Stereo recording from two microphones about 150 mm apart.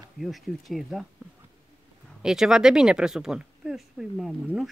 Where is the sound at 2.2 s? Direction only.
5° right (ahead or behind).